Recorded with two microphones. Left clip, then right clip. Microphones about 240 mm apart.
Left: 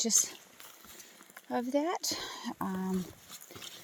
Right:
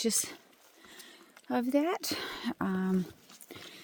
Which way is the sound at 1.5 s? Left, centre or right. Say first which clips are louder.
Right 2 dB; right.